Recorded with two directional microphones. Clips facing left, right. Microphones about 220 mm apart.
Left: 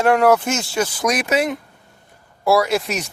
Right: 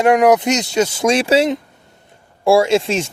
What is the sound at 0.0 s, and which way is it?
Speech, 15° right (ahead or behind).